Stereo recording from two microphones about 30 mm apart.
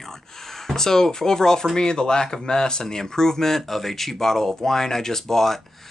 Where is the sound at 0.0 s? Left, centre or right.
Centre.